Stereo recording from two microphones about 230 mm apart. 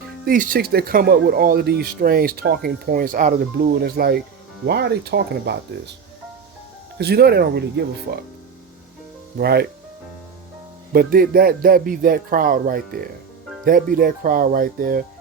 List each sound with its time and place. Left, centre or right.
0.3 s speech: right
7.0 s speech: right
9.4 s speech: right
10.9 s speech: right